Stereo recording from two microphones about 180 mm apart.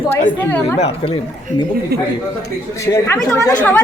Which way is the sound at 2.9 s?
15° left (ahead or behind).